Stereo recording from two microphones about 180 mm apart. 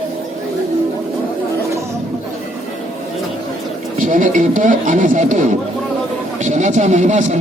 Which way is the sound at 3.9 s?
45° right (ahead or behind).